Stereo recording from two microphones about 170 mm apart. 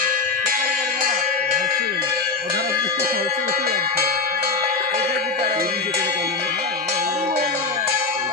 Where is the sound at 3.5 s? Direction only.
60° right (ahead or behind).